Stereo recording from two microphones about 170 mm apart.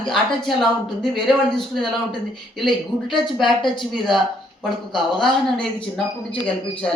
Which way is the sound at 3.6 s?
30° left (ahead or behind).